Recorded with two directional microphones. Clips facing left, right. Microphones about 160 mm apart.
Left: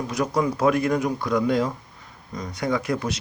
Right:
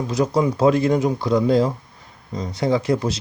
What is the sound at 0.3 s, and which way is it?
Speech, 25° right (ahead or behind).